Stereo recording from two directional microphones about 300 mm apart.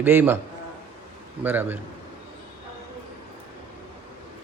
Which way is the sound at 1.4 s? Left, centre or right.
Centre.